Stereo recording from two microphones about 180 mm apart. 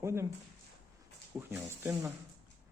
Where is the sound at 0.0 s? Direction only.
15° right (ahead or behind).